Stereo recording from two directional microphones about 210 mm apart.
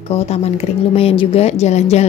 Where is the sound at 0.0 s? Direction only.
30° left (ahead or behind).